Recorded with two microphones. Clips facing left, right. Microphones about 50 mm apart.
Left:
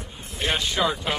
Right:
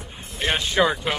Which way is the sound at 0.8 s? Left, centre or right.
Right.